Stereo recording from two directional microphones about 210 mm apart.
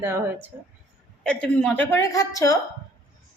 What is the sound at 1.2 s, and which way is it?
A woman's voice, 5° left (ahead or behind).